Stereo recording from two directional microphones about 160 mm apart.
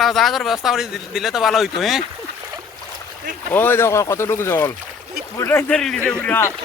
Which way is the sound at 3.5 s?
15° left (ahead or behind).